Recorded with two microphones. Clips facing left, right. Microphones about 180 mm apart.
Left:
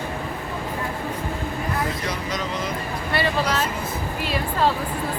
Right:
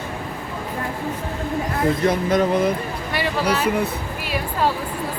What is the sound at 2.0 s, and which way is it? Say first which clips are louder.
Speech: right 10 dB; 55° right (ahead or behind).